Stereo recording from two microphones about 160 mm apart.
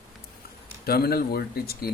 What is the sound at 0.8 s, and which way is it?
Speech, 75° left (ahead or behind).